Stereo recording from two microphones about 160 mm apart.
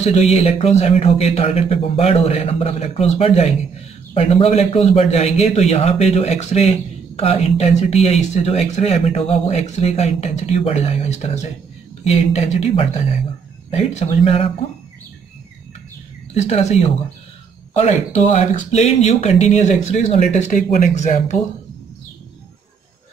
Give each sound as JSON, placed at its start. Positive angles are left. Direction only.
{"t": 0.0, "sound": "a man's voice", "side_deg": 40}
{"t": 16.3, "sound": "a man's voice", "side_deg": 45}